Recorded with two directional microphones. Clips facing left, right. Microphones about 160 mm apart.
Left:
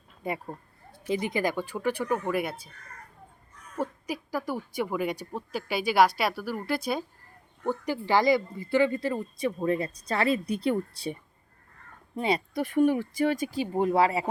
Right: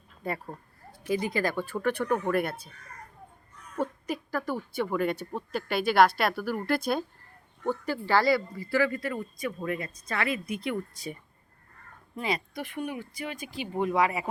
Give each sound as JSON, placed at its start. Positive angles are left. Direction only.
{"t": 0.3, "sound": "a woman's voice", "side_deg": 15}
{"t": 3.8, "sound": "a woman's voice", "side_deg": 10}